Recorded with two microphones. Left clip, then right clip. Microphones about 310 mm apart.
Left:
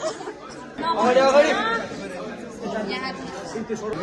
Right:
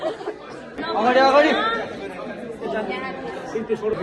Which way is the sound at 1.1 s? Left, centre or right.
Right.